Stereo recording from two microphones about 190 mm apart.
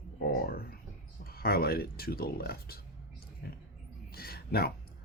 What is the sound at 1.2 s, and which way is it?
Speech, 55° left (ahead or behind).